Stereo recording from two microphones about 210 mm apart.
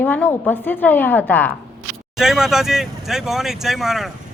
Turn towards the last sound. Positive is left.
turn(degrees=0)  # may be behind; listen again after turning